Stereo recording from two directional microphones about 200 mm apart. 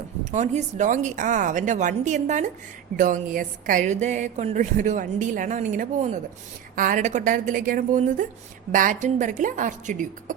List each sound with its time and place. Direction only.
0.3 s speech: 35° right (ahead or behind)